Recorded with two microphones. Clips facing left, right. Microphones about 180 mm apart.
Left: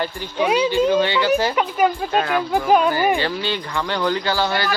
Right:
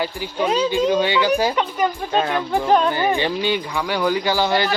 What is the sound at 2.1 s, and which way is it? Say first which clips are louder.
Speech: even; 20° right (ahead or behind).